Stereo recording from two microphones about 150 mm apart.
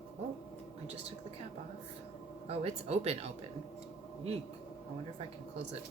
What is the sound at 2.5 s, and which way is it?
Speech, 45° right (ahead or behind).